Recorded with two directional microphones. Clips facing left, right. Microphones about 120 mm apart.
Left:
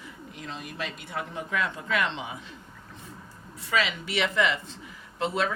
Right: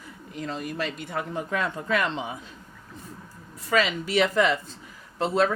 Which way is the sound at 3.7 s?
40° right (ahead or behind).